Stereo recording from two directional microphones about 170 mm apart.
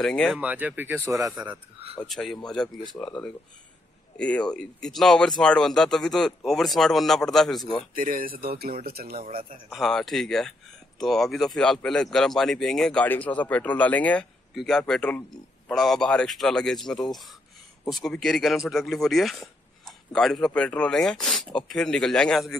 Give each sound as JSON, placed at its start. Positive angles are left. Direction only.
{"t": 0.0, "sound": "speech", "side_deg": 5}
{"t": 0.4, "sound": "speech", "side_deg": -10}
{"t": 7.9, "sound": "speech", "side_deg": -55}
{"t": 9.1, "sound": "speech", "side_deg": -55}
{"t": 9.7, "sound": "speech", "side_deg": 0}